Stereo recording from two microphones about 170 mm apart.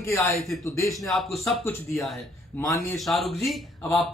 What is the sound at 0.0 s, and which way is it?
Speech, 15° left (ahead or behind).